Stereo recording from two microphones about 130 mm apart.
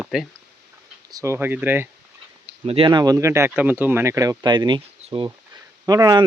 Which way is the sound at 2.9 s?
30° right (ahead or behind).